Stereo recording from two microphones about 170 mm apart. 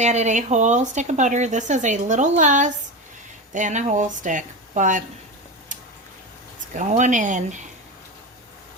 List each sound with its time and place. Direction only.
0.0 s speech: 45° right (ahead or behind)
6.7 s speech: 45° right (ahead or behind)